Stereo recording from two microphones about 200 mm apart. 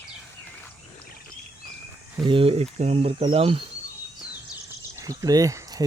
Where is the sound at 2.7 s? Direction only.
35° right (ahead or behind).